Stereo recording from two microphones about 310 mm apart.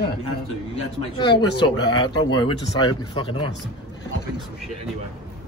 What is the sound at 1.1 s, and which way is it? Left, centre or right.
Speech, centre.